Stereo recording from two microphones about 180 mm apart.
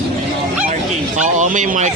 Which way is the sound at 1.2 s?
40° right (ahead or behind).